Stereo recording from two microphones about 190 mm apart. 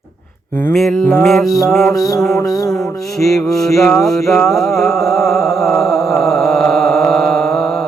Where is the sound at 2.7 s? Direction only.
Centre (ahead or behind).